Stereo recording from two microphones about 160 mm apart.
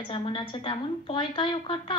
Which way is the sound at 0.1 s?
30° left (ahead or behind).